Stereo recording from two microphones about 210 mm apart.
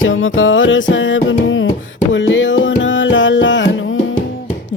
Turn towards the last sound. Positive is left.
turn(degrees=60)  # may be behind; listen again after turning